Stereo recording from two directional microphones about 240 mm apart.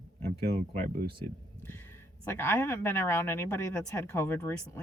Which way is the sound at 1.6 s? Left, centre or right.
Centre.